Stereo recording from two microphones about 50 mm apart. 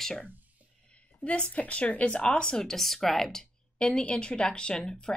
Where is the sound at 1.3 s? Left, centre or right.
Left.